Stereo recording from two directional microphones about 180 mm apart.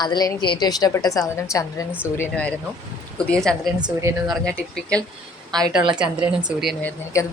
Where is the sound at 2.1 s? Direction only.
5° left (ahead or behind).